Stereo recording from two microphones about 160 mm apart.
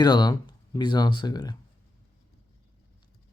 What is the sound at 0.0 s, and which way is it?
Speech, 25° left (ahead or behind).